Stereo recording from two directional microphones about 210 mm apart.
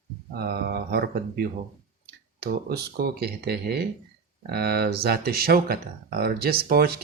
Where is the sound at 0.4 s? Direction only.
45° right (ahead or behind).